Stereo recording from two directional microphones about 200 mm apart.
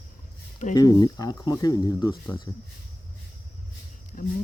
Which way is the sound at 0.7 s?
20° left (ahead or behind).